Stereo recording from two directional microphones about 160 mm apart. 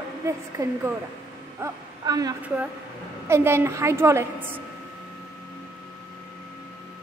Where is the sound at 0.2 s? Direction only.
15° right (ahead or behind).